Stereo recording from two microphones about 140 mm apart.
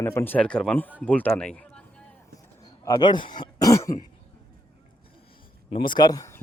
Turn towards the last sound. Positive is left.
turn(degrees=25)  # may be behind; listen again after turning